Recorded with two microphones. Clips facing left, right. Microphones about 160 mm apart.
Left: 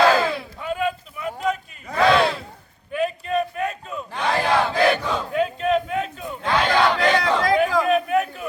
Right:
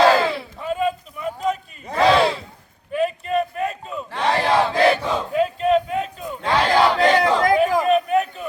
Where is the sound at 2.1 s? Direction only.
Centre (ahead or behind).